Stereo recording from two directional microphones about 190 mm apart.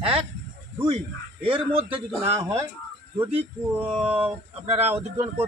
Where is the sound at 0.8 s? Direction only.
30° right (ahead or behind).